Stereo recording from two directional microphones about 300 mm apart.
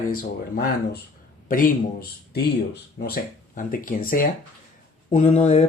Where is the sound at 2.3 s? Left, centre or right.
Left.